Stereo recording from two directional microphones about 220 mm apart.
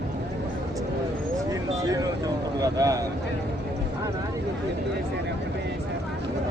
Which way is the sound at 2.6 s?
15° right (ahead or behind).